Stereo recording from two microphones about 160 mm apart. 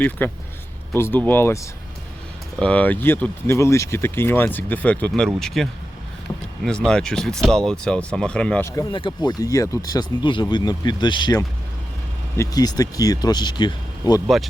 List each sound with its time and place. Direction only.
0.2 s speech: 10° left (ahead or behind)
2.6 s speech: 10° left (ahead or behind)
8.9 s speech: 30° left (ahead or behind)